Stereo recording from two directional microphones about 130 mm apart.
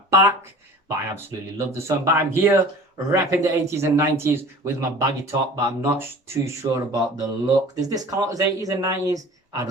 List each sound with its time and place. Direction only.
0.1 s speech: 25° right (ahead or behind)